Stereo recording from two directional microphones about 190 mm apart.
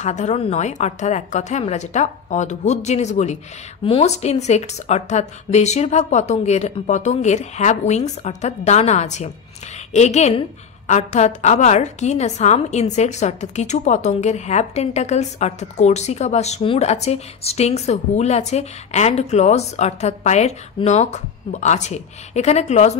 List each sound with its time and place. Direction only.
0.0 s a woman's voice: 35° left (ahead or behind)